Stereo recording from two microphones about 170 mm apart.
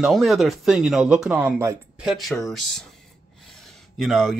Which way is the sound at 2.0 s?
Centre (ahead or behind).